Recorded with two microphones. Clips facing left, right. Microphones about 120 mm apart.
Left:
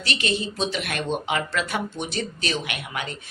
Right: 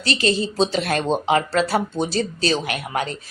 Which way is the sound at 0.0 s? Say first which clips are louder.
Right 6 dB; 35° right (ahead or behind).